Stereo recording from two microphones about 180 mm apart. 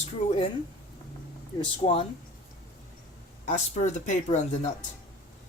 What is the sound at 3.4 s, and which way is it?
Speech, 40° left (ahead or behind).